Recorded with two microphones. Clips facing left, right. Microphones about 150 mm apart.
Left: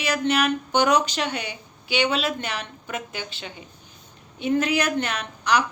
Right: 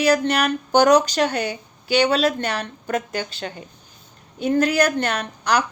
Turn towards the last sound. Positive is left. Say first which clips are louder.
# right 2 dB
turn(degrees=-40)  # may be behind; listen again after turning